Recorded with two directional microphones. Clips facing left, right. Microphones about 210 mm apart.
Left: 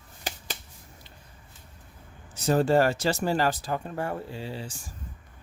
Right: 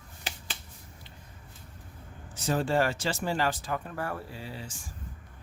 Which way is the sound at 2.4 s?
40° left (ahead or behind).